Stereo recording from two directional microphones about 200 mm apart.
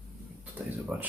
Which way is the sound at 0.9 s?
5° right (ahead or behind).